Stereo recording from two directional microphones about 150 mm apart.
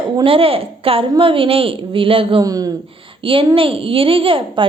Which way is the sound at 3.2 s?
35° right (ahead or behind).